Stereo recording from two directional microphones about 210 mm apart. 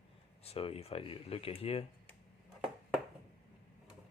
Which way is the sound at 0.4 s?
30° left (ahead or behind).